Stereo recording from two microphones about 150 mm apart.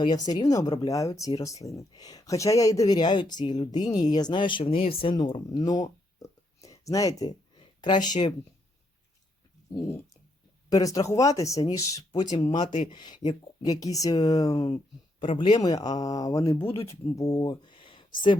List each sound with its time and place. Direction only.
0.0 s speech: 30° left (ahead or behind)
6.2 s a sound: 20° left (ahead or behind)
7.8 s speech: 30° left (ahead or behind)
10.7 s speech: 25° left (ahead or behind)